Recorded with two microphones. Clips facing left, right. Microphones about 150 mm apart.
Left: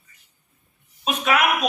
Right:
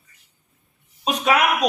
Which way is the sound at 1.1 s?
35° right (ahead or behind).